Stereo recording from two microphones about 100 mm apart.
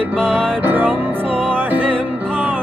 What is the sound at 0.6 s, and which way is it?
Music, 20° right (ahead or behind).